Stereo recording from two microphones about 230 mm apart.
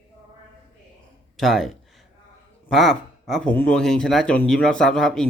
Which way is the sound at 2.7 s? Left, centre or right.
Centre.